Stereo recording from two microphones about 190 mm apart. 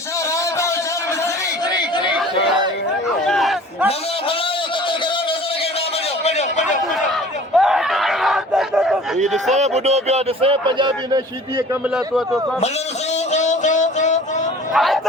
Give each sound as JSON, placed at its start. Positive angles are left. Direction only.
{"t": 3.2, "sound": "a sound", "side_deg": 0}
{"t": 6.2, "sound": "a sound", "side_deg": 35}
{"t": 7.5, "sound": "crowd", "side_deg": 0}
{"t": 9.6, "sound": "speech", "side_deg": -35}
{"t": 11.9, "sound": "speech", "side_deg": 0}
{"t": 13.3, "sound": "music", "side_deg": 40}
{"t": 14.7, "sound": "speech", "side_deg": 0}